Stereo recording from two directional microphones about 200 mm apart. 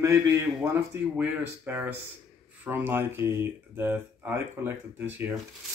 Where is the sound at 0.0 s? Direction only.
15° right (ahead or behind).